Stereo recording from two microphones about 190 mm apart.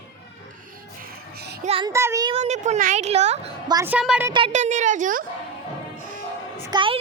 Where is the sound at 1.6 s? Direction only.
30° right (ahead or behind).